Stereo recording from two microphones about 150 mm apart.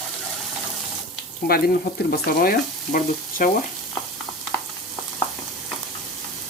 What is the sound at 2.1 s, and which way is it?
Frying, 80° left.